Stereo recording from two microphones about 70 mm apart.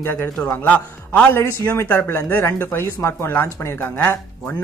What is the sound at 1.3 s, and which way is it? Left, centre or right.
Speech, left.